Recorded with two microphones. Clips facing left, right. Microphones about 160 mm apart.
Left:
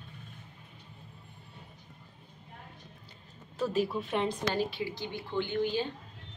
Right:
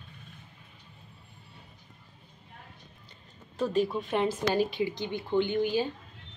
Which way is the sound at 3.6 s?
5° left (ahead or behind).